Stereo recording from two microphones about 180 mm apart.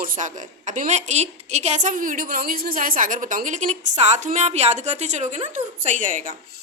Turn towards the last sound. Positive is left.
turn(degrees=-45)  # may be behind; listen again after turning